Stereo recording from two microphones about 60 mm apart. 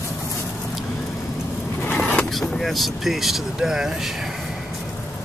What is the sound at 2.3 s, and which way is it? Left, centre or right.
Speech, centre.